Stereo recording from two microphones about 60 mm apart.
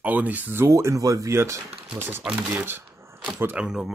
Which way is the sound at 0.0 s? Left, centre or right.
Right.